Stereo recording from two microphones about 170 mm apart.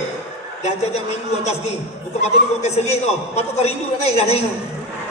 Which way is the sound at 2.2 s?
40° left (ahead or behind).